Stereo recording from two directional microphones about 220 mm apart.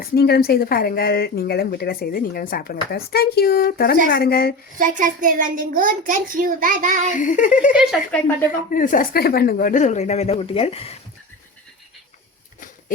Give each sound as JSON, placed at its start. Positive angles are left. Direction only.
{"t": 0.0, "sound": "speech", "side_deg": 45}
{"t": 4.8, "sound": "a child's voice", "side_deg": -35}
{"t": 7.1, "sound": "speech", "side_deg": 35}
{"t": 7.7, "sound": "speech", "side_deg": -5}
{"t": 8.7, "sound": "speech", "side_deg": 40}